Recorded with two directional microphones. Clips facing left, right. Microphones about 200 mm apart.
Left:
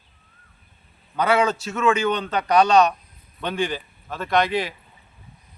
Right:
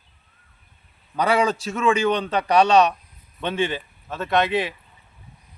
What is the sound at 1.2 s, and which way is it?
Speech, 35° right (ahead or behind).